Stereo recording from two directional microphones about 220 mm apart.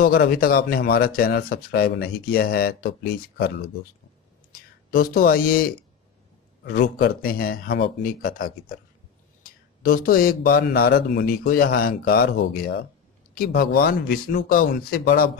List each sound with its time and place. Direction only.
0.0 s speech: 40° left (ahead or behind)